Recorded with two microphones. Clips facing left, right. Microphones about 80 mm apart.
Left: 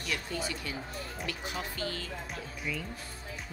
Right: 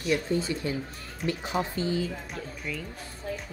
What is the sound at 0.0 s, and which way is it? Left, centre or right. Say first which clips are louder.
Speech: right 8 dB; right.